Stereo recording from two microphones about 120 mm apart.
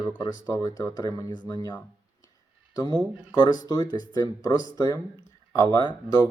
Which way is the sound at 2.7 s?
35° left (ahead or behind).